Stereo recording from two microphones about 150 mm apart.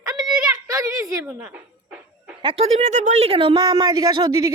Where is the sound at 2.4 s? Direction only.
30° right (ahead or behind).